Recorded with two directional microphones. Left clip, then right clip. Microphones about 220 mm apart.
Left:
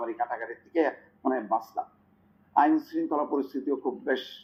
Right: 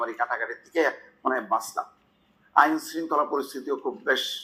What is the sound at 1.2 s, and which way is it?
Speech, 35° right (ahead or behind).